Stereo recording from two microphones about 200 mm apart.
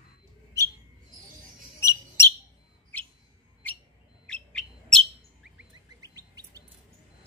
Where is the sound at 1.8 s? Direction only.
15° left (ahead or behind).